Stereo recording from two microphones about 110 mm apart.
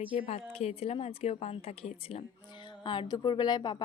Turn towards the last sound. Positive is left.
turn(degrees=40)  # may be behind; listen again after turning